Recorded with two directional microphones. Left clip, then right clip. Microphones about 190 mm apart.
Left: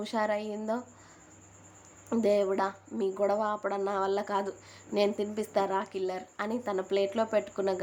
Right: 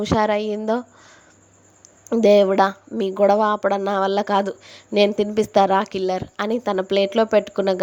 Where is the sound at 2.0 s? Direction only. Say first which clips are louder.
Right 12 dB; 40° right (ahead or behind).